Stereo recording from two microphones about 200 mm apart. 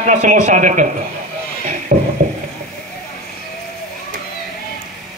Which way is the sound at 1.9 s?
40° right (ahead or behind).